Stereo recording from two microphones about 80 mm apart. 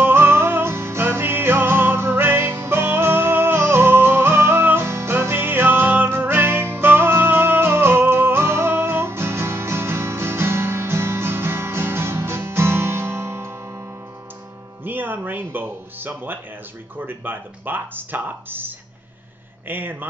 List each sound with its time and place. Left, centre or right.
0.0 s music: right
14.9 s music: right
17.0 s speech: right
19.7 s speech: right